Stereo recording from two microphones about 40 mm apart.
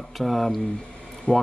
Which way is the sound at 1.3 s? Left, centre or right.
Left.